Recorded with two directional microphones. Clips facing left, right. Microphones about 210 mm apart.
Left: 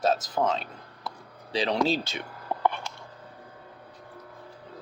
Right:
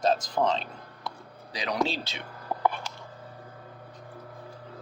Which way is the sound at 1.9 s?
50° left (ahead or behind).